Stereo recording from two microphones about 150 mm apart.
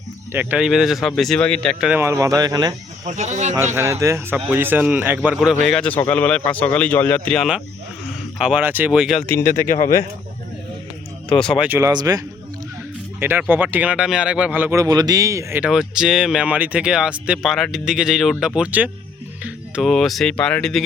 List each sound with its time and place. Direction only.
0.3 s speech: 5° right (ahead or behind)
1.8 s speech: 10° right (ahead or behind)
2.0 s speech: 20° right (ahead or behind)
3.1 s speech: 50° right (ahead or behind)
3.8 s speech: 20° right (ahead or behind)
5.4 s a man's voice: centre (ahead or behind)
11.5 s speech: 5° right (ahead or behind)
11.8 s speech: 25° right (ahead or behind)
13.1 s speech: 15° right (ahead or behind)
14.8 s speech: 25° right (ahead or behind); by 20.8 s 5° left (ahead or behind)